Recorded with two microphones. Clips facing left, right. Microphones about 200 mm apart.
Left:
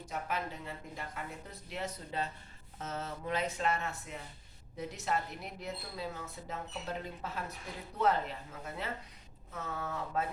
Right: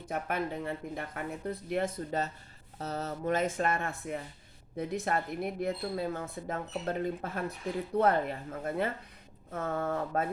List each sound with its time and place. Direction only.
0.0 s speech: 55° right (ahead or behind)